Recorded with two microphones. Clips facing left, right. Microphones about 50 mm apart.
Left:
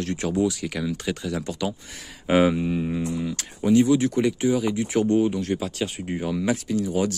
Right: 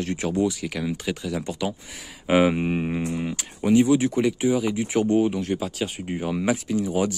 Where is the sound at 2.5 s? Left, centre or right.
Right.